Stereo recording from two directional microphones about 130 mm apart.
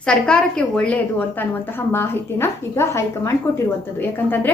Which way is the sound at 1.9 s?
20° left (ahead or behind).